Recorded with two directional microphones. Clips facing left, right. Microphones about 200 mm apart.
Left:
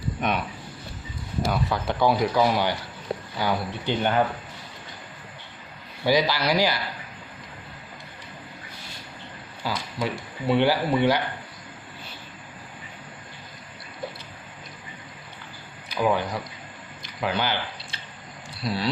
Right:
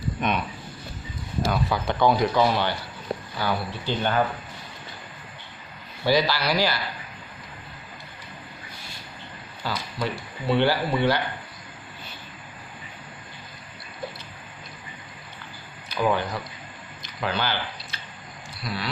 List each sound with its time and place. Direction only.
0.2 s speech: 10° left (ahead or behind)
6.1 s speech: 15° left (ahead or behind)
9.6 s speech: 10° left (ahead or behind)
16.0 s speech: 10° left (ahead or behind)
17.9 s squish: 25° left (ahead or behind)
18.5 s a sound: 30° left (ahead or behind)